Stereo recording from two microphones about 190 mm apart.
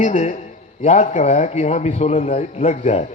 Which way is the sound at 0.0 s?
40° left (ahead or behind).